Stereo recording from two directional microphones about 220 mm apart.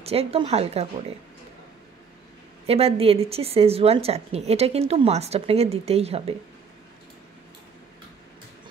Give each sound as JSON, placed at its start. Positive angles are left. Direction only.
{"t": 0.0, "sound": "speech", "side_deg": -25}
{"t": 2.6, "sound": "speech", "side_deg": -25}